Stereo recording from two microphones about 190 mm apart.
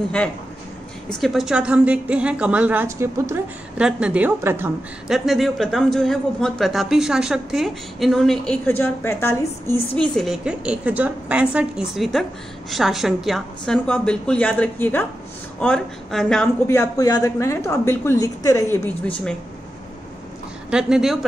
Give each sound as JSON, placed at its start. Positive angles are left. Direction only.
{"t": 1.0, "sound": "a woman's voice", "side_deg": 0}
{"t": 10.1, "sound": "a woman's voice", "side_deg": 0}
{"t": 16.6, "sound": "a woman's voice", "side_deg": 20}
{"t": 20.7, "sound": "a woman's voice", "side_deg": -5}